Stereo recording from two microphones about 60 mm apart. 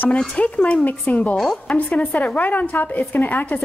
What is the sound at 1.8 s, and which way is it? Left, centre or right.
A woman's voice, left.